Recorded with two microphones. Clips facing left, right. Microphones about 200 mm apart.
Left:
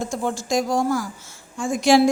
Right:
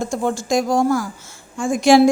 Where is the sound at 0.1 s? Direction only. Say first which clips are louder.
Right 4 dB; 55° right (ahead or behind).